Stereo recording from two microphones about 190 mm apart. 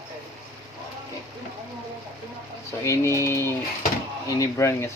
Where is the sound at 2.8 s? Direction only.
15° left (ahead or behind).